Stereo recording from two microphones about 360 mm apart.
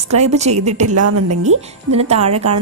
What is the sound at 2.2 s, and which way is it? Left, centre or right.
Speech, right.